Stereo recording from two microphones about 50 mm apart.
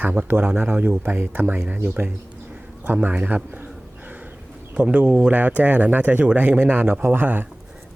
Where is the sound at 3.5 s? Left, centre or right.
Right.